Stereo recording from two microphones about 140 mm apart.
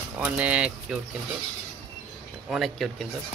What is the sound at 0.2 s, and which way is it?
Speech, 10° right (ahead or behind).